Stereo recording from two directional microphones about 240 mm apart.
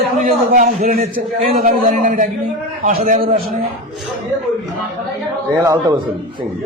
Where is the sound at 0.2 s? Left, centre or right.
Right.